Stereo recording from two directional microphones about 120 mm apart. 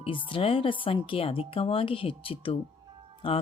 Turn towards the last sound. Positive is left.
turn(degrees=45)  # may be behind; listen again after turning